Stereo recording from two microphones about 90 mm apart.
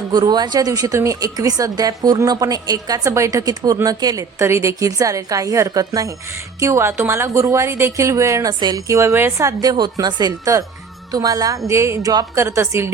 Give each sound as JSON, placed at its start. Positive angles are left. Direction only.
{"t": 0.1, "sound": "a woman's voice", "side_deg": -50}
{"t": 6.6, "sound": "a woman's voice", "side_deg": -30}
{"t": 8.4, "sound": "a woman's voice", "side_deg": -45}
{"t": 11.7, "sound": "a woman's voice", "side_deg": -30}